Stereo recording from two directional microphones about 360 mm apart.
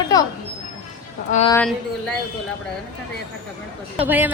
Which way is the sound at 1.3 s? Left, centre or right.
Centre.